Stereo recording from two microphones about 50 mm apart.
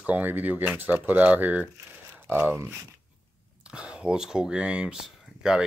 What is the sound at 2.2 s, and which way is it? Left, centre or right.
Speech, right.